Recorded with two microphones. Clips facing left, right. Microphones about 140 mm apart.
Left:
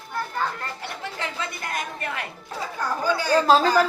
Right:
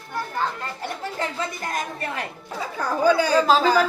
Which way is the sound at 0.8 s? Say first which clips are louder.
Right 4 dB; 40° right (ahead or behind).